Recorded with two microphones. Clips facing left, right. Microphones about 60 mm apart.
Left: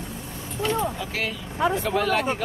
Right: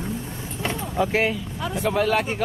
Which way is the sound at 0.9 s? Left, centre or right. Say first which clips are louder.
Right 8 dB; right.